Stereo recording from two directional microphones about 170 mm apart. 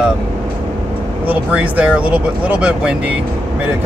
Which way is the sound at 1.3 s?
10° right (ahead or behind).